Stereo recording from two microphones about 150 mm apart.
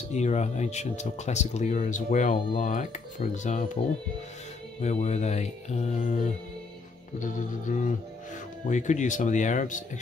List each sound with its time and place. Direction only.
0.1 s speech: 50° left (ahead or behind)
4.8 s speech: 50° left (ahead or behind)
7.2 s speech: 60° left (ahead or behind)